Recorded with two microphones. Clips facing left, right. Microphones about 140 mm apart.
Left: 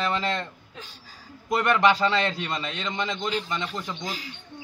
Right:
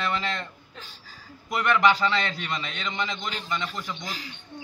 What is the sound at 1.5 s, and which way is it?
A man's voice, 35° left (ahead or behind).